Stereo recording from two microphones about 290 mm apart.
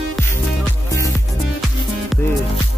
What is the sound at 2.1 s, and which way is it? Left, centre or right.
Music, centre.